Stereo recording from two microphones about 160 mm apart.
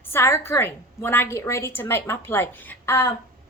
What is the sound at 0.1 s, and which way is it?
A woman's voice, 15° left (ahead or behind).